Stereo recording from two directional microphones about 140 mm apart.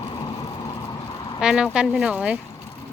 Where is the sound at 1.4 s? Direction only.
5° right (ahead or behind).